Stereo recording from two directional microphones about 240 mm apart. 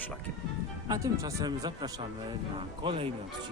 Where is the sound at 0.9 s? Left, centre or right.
Centre.